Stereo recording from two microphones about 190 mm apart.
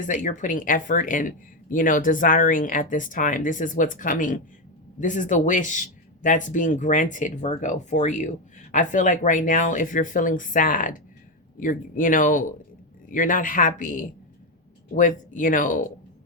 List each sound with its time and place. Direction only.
0.0 s speech: 40° left (ahead or behind)